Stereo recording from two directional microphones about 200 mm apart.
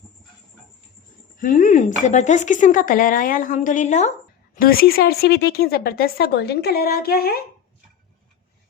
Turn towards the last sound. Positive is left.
turn(degrees=50)  # may be behind; listen again after turning